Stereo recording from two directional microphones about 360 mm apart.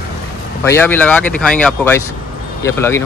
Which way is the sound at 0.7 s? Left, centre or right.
Centre.